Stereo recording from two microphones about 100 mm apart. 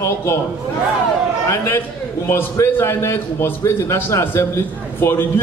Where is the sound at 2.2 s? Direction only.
25° left (ahead or behind).